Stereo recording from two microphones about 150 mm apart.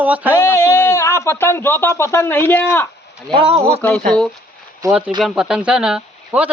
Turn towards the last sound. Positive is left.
turn(degrees=-5)  # may be behind; listen again after turning